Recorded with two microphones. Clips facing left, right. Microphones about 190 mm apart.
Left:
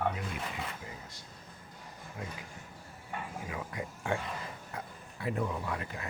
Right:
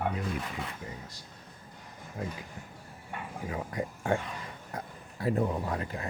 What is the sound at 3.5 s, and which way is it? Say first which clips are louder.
Speech: right 8 dB; 35° right (ahead or behind).